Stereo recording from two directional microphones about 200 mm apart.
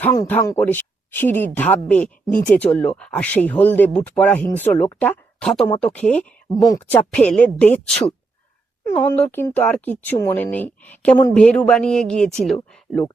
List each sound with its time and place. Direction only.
0.0 s speech: 10° left (ahead or behind)
7.1 s a woman's voice: 5° left (ahead or behind)